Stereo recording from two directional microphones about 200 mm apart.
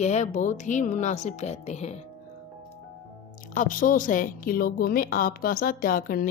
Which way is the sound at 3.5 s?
40° left (ahead or behind).